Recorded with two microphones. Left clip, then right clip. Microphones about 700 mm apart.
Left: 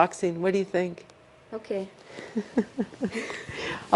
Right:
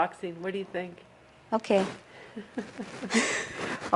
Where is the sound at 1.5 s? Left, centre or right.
Right.